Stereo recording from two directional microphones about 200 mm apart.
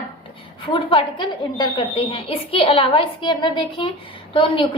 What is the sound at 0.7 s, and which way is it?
A woman's voice, 25° left (ahead or behind).